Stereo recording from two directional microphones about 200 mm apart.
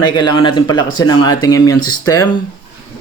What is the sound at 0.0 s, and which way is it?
Speech, 20° left (ahead or behind).